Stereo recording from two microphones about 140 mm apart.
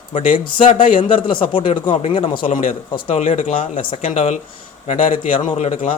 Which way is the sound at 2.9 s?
50° left (ahead or behind).